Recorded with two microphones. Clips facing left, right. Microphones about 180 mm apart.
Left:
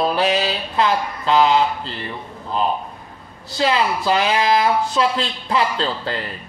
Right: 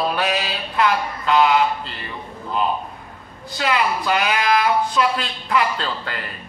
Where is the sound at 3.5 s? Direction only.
30° left (ahead or behind).